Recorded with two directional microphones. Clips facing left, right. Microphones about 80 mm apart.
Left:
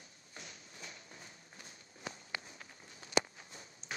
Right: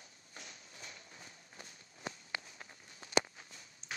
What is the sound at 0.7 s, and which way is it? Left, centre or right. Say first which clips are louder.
Walk: left 1 dB; left.